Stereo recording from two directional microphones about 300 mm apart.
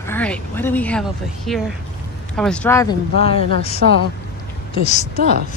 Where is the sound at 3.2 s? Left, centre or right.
Centre.